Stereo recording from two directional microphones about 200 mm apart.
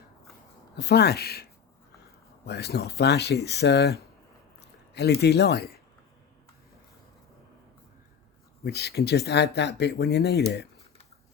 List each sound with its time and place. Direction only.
0.8 s speech: 55° left (ahead or behind)
4.9 s speech: 55° left (ahead or behind)
8.6 s speech: 55° left (ahead or behind)